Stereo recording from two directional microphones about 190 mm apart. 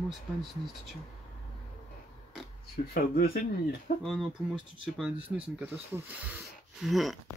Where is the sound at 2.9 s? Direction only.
55° left (ahead or behind).